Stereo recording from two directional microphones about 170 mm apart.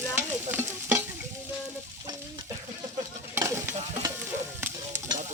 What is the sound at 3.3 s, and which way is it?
Stir, 15° right (ahead or behind).